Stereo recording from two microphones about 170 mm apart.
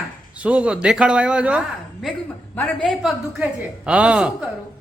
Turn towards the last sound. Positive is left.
turn(degrees=-5)  # may be behind; listen again after turning